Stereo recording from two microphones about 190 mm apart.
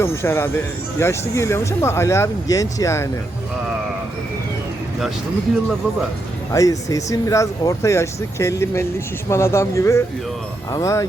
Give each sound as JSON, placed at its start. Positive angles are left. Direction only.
{"t": 0.0, "sound": "speech", "side_deg": 15}
{"t": 6.5, "sound": "speech", "side_deg": 15}